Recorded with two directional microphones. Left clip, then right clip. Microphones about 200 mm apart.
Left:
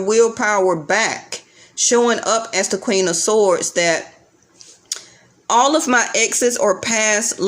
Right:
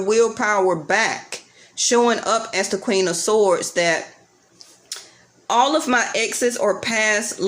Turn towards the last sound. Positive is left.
turn(degrees=15)  # may be behind; listen again after turning